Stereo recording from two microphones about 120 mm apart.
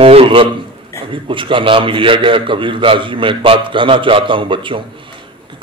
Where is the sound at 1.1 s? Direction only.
45° right (ahead or behind).